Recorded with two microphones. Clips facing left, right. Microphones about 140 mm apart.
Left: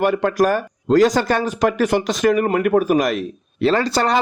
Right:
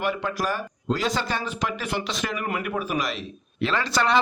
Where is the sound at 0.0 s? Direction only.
50° left (ahead or behind).